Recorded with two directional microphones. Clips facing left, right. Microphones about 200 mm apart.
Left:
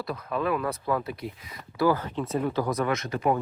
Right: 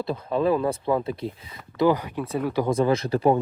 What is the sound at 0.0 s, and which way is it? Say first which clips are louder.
Speech: right 5 dB; 25° right (ahead or behind).